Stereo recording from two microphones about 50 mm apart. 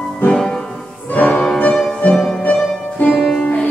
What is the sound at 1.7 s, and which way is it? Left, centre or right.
Music, centre.